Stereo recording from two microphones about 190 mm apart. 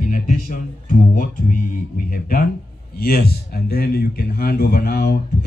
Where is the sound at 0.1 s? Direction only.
45° left (ahead or behind).